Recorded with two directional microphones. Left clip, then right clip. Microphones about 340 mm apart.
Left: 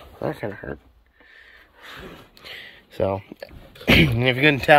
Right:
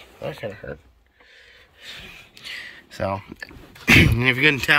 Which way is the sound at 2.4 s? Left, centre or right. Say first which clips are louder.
Right 4 dB; centre.